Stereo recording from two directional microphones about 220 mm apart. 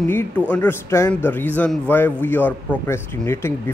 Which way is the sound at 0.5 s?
10° left (ahead or behind).